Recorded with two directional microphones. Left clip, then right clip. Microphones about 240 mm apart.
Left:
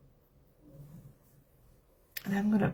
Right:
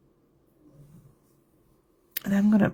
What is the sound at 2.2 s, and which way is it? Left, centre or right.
Speech, right.